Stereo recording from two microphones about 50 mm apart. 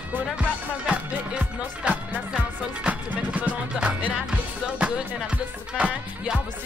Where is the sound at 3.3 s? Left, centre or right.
Right.